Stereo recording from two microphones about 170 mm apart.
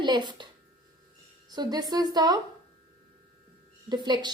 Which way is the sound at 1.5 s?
25° right (ahead or behind).